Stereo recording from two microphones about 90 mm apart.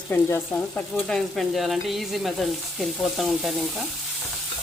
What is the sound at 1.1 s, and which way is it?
Sizzle, centre (ahead or behind).